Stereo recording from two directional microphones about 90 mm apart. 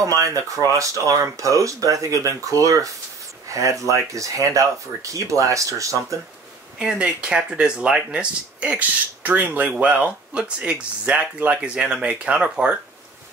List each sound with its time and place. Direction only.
0.0 s speech: 35° right (ahead or behind)
6.8 s speech: 10° right (ahead or behind)